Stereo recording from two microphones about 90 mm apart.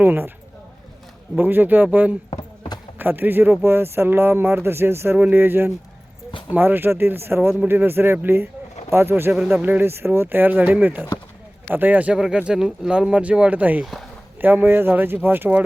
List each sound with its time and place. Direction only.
0.0 s speech: 25° right (ahead or behind)
1.4 s speech: 20° right (ahead or behind)
5.1 s speech: 15° right (ahead or behind)
9.3 s speech: 10° right (ahead or behind)
9.6 s speech: 20° right (ahead or behind)